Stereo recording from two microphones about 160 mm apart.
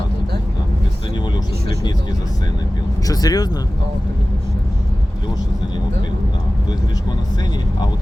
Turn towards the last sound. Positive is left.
turn(degrees=25)  # may be behind; listen again after turning